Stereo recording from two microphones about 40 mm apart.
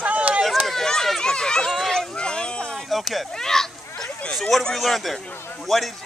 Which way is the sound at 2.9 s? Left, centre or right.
Centre.